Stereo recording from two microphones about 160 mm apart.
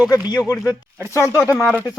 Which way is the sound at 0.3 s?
25° left (ahead or behind).